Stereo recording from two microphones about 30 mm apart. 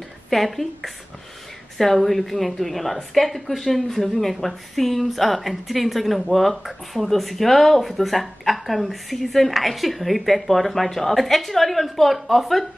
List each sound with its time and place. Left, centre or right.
0.3 s speech: centre
2.0 s speech: centre